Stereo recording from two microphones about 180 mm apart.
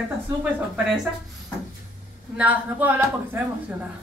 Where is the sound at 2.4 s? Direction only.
10° right (ahead or behind).